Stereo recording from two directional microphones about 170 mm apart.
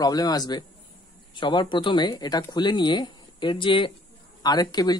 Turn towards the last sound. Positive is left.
turn(degrees=25)  # may be behind; listen again after turning